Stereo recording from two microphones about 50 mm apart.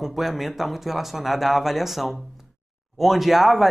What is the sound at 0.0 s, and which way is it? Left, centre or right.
Speech, centre.